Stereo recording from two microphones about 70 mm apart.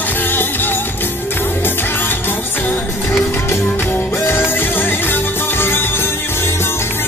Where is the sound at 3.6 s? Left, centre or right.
Left.